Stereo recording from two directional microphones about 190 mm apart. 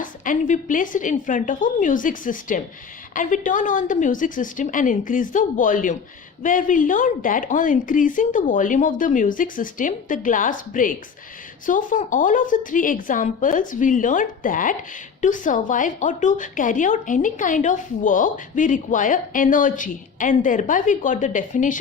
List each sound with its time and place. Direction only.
0.0 s a woman's voice: 45° left (ahead or behind)